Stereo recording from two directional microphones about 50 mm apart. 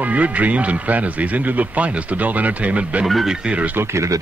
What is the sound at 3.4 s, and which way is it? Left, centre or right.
Speech, right.